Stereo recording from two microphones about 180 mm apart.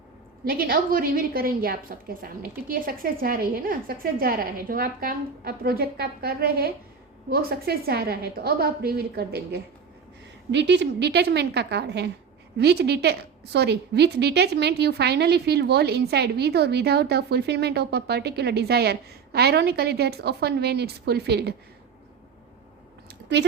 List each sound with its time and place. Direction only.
0.4 s a woman's voice: 55° right (ahead or behind)
10.5 s a woman's voice: 75° right (ahead or behind)
23.0 s a sound: 70° right (ahead or behind)